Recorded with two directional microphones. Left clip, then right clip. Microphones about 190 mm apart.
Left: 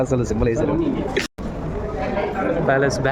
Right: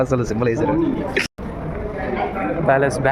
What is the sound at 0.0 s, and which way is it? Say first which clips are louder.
Speech: right 1 dB; 5° left (ahead or behind).